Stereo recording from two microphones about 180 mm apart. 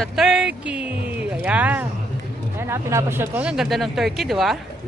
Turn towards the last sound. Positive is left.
turn(degrees=0)  # may be behind; listen again after turning